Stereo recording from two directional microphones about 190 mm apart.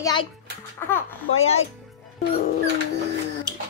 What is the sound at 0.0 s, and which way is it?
Speech, 25° left (ahead or behind).